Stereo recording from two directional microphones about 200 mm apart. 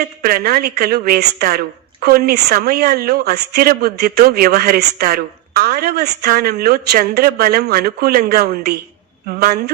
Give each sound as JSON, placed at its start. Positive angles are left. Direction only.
{"t": 0.2, "sound": "a woman's voice", "side_deg": -50}